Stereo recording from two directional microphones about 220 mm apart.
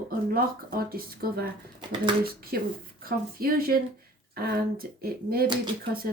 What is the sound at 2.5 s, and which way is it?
Speech, 40° right (ahead or behind).